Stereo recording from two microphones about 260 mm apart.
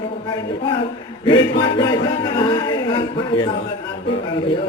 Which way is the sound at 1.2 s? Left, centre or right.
Centre.